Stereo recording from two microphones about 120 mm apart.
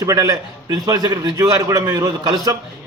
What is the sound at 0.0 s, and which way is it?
A man's voice, 30° right (ahead or behind).